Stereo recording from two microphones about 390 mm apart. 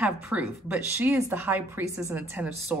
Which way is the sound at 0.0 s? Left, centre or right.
Centre.